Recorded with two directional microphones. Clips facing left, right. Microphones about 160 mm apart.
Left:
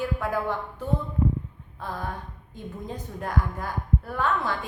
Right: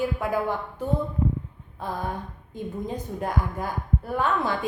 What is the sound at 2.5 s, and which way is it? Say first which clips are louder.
A woman's voice: right 5 dB; 15° right (ahead or behind).